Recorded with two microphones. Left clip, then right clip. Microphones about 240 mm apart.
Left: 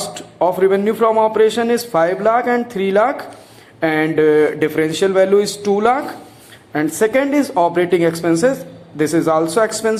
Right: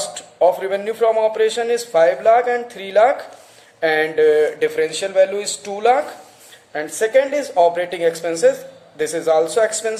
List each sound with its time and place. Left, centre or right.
0.0 s speech: centre